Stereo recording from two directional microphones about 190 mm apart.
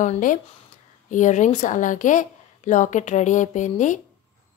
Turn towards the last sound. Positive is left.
turn(degrees=40)  # may be behind; listen again after turning